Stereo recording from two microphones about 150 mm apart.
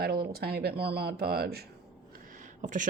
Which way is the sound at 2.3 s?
60° right (ahead or behind).